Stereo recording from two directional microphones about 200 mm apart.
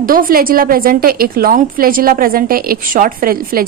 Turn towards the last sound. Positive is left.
turn(degrees=-45)  # may be behind; listen again after turning